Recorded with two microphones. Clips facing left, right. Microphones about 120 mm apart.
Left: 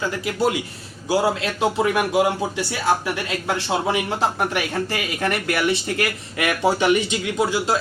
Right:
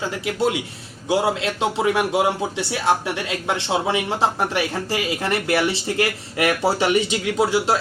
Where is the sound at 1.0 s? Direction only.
25° right (ahead or behind).